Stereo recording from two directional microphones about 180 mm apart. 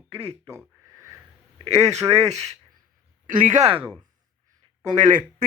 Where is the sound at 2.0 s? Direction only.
15° right (ahead or behind).